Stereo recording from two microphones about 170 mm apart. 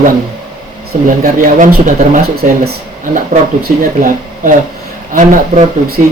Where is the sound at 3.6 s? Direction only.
55° right (ahead or behind).